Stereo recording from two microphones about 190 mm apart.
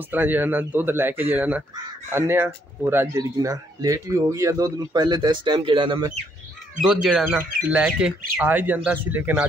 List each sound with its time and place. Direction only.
0.1 s speech: 10° right (ahead or behind)
6.8 s speech: centre (ahead or behind)